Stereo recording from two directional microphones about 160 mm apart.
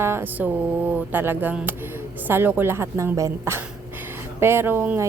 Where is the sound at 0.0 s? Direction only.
15° right (ahead or behind).